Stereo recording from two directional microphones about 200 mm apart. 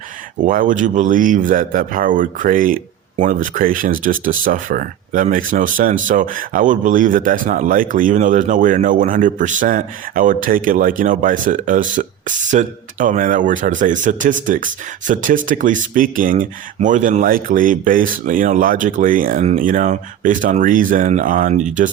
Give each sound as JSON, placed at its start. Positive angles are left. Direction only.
{"t": 0.4, "sound": "speech", "side_deg": -40}